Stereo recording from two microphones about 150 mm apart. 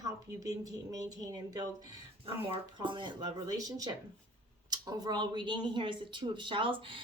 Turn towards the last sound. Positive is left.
turn(degrees=-35)  # may be behind; listen again after turning